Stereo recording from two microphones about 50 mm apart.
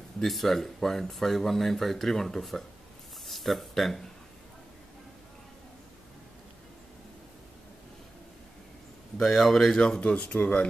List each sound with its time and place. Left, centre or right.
0.2 s speech: centre
9.2 s speech: centre
9.8 s speech: centre